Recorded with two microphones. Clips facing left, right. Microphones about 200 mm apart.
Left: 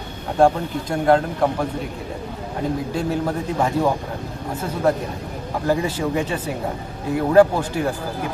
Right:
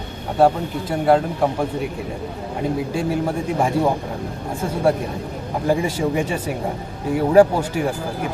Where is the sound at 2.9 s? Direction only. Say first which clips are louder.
Right 1 dB; 10° right (ahead or behind).